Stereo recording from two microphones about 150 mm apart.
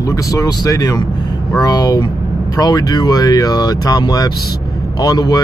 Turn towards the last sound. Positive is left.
turn(degrees=25)  # may be behind; listen again after turning